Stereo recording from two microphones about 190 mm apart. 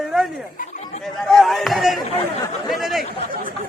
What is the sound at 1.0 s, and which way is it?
Speech, centre (ahead or behind).